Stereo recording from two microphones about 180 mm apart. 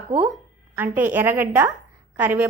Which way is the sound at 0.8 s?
10° right (ahead or behind).